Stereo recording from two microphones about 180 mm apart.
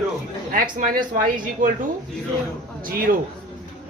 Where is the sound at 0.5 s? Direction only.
50° right (ahead or behind).